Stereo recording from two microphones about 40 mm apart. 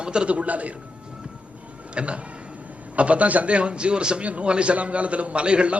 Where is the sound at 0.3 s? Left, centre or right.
Right.